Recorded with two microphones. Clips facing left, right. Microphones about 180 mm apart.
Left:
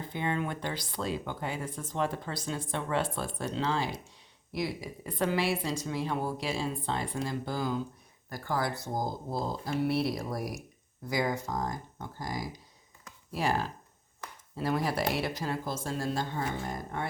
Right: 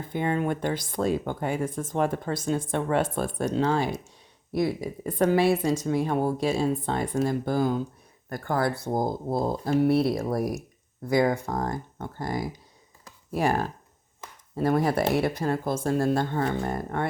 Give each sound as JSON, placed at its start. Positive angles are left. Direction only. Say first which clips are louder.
{"t": 0.1, "sound": "speech", "louder": "right 7 dB", "side_deg": -45}